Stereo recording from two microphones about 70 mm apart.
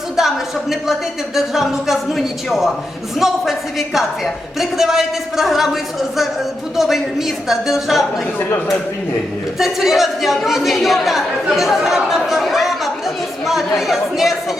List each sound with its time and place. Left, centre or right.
0.2 s a woman's voice: centre
8.4 s speech: left
9.6 s speech: centre